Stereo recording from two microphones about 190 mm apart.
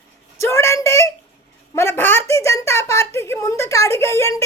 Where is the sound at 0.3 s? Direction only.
15° left (ahead or behind).